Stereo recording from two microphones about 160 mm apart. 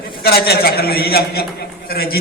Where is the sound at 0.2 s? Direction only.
80° left.